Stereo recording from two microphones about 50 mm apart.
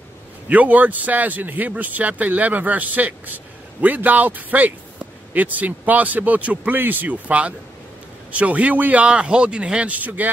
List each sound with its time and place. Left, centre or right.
0.5 s speech: right
7.1 s speech: right
9.0 s speech: right